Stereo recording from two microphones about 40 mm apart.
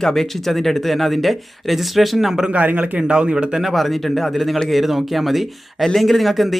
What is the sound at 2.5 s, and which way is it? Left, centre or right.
Speech, right.